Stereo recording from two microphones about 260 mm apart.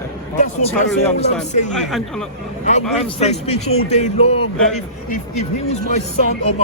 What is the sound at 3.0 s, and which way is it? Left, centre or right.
Speech, left.